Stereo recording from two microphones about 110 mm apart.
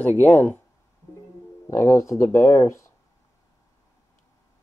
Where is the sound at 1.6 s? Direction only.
30° left (ahead or behind).